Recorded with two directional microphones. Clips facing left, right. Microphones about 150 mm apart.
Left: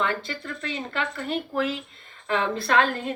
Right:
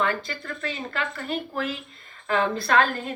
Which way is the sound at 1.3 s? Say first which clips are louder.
Left 4 dB; 25° left (ahead or behind).